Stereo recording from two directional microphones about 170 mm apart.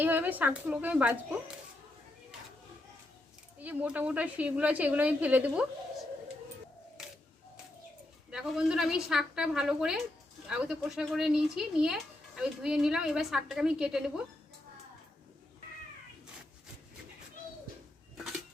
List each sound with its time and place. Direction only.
0.0 s a woman's voice: 10° right (ahead or behind)
3.6 s a woman's voice: 10° right (ahead or behind)
8.3 s speech: 5° right (ahead or behind)